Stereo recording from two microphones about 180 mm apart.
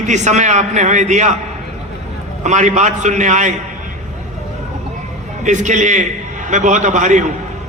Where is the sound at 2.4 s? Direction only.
40° right (ahead or behind).